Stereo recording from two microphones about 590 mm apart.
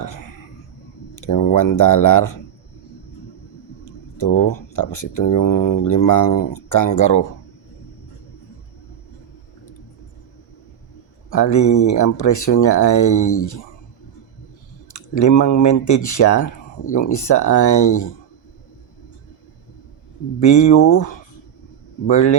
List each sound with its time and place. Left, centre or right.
1.1 s speech: left
4.7 s speech: left
11.3 s speech: left
14.9 s speech: left
20.4 s speech: left